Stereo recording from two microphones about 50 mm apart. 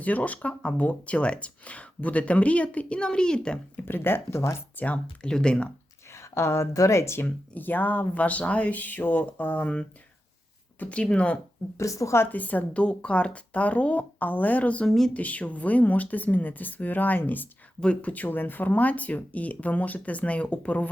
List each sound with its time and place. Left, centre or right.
0.0 s speech: left
3.8 s speech: left
4.8 s speech: left
5.2 s speech: centre
6.1 s speech: left
7.3 s speech: left
10.8 s speech: left
11.8 s a woman's voice: left
12.3 s speech: left
14.8 s speech: centre
15.1 s speech: left